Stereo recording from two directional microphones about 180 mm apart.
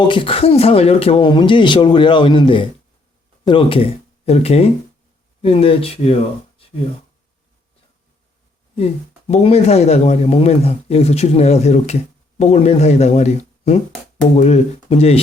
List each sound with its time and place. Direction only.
0.1 s speech: 30° left (ahead or behind)
8.7 s speech: 35° left (ahead or behind)